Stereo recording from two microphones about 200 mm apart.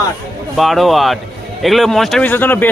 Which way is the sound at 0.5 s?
Centre (ahead or behind).